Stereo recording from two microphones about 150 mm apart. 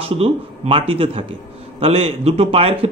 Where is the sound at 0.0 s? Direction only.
40° right (ahead or behind).